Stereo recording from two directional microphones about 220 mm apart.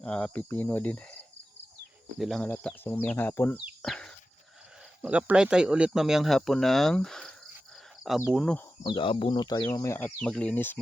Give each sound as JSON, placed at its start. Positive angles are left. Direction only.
{"t": 0.0, "sound": "speech", "side_deg": 5}
{"t": 2.1, "sound": "speech", "side_deg": 0}
{"t": 8.8, "sound": "speech", "side_deg": 20}
{"t": 9.6, "sound": "speech", "side_deg": 10}